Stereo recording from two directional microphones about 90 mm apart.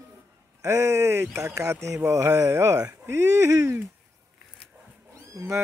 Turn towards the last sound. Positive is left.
turn(degrees=-30)  # may be behind; listen again after turning